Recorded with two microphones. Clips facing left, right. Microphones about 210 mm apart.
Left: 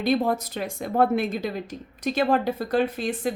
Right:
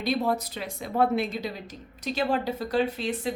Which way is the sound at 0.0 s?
50° left (ahead or behind).